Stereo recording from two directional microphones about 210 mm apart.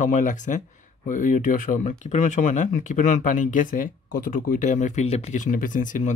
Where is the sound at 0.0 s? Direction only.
35° left (ahead or behind).